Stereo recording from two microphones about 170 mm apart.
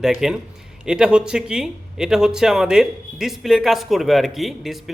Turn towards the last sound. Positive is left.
turn(degrees=0)  # may be behind; listen again after turning